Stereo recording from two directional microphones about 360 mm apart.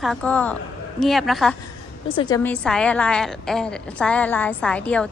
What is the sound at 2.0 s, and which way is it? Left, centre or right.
A woman's voice, centre.